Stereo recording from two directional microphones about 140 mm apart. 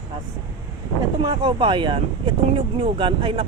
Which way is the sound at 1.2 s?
35° right (ahead or behind).